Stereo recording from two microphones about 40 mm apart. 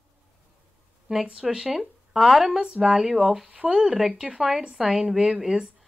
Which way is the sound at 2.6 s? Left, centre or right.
Centre.